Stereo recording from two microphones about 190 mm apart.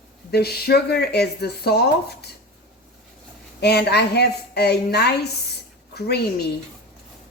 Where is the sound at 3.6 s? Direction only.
60° left (ahead or behind).